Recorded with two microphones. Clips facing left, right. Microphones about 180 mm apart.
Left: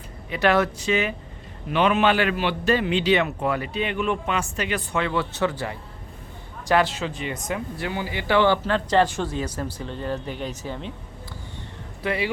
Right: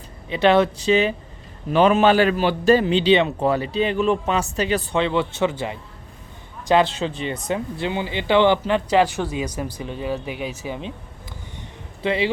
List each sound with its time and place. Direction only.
0.3 s a man's voice: 25° right (ahead or behind)
12.0 s speech: 25° right (ahead or behind)